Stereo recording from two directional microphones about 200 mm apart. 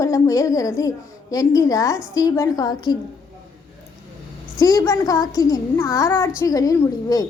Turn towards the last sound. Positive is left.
turn(degrees=20)  # may be behind; listen again after turning